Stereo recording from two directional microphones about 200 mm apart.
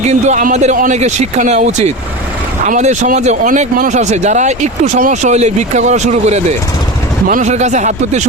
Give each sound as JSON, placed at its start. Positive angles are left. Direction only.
{"t": 0.0, "sound": "speech", "side_deg": -35}